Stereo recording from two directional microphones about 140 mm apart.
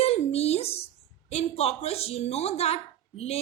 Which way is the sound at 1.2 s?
45° left (ahead or behind).